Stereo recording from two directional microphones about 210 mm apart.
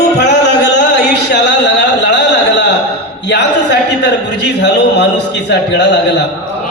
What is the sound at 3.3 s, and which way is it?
A man's voice, 55° left (ahead or behind).